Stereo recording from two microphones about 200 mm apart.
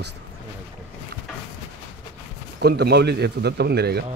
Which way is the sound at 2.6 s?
55° right (ahead or behind).